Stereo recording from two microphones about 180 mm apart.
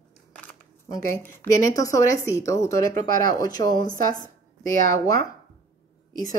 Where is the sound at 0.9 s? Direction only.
15° left (ahead or behind).